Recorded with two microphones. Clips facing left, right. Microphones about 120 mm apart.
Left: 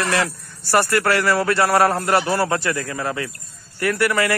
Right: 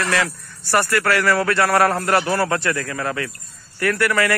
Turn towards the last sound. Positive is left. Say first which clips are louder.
# even
turn(degrees=25)  # may be behind; listen again after turning